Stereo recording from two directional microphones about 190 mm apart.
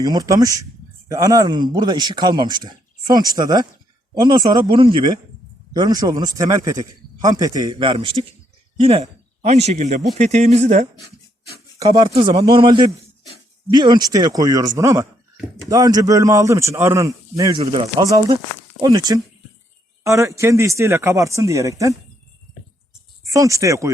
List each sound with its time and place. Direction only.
0.0 s speech: 20° right (ahead or behind); by 10.8 s 35° right (ahead or behind)
11.8 s speech: 25° right (ahead or behind)
17.6 s speech: 30° right (ahead or behind)
18.0 s speech: 15° right (ahead or behind)
23.3 s speech: 15° right (ahead or behind)